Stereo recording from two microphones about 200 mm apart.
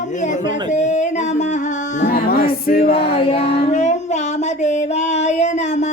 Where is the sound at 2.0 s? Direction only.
50° left (ahead or behind).